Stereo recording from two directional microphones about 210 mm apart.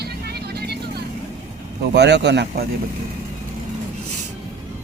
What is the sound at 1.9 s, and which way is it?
Speech, 55° right (ahead or behind).